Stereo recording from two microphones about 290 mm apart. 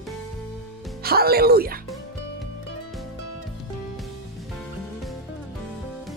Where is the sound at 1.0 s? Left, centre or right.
Right.